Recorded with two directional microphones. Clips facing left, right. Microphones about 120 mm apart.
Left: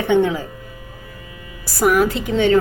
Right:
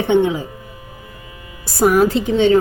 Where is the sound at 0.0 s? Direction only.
20° right (ahead or behind).